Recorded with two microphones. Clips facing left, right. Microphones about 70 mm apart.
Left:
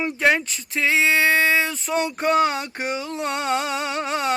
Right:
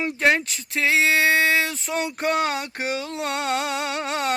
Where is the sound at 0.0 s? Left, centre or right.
Centre.